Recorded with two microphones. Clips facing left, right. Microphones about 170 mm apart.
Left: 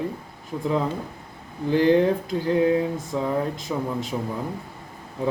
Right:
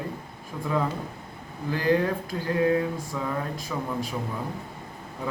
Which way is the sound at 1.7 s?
25° left (ahead or behind).